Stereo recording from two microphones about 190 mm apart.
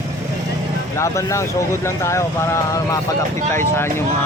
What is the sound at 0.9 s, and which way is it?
Speech, 15° left (ahead or behind).